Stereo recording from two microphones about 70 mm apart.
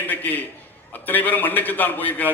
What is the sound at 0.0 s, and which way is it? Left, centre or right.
A man's voice, left.